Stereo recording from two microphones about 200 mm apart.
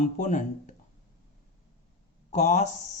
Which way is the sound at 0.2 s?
40° left (ahead or behind).